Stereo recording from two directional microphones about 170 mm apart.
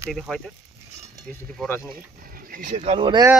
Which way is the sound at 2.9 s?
25° right (ahead or behind).